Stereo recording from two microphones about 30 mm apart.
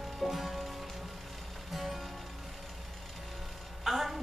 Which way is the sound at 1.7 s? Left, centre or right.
Centre.